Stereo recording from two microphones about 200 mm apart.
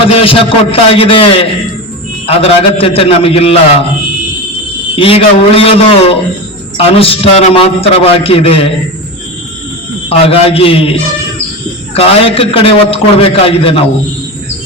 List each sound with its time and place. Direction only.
0.0 s a man's voice: 25° left (ahead or behind)
4.9 s a man's voice: 30° left (ahead or behind)
10.1 s a man's voice: 30° left (ahead or behind)
11.9 s a man's voice: 30° left (ahead or behind)